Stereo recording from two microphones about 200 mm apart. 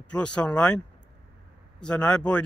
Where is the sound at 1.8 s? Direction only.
5° left (ahead or behind).